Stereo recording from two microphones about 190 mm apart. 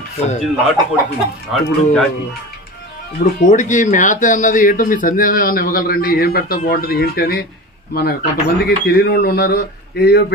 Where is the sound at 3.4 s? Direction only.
40° left (ahead or behind).